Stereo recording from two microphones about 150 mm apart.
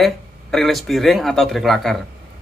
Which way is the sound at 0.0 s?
Centre (ahead or behind).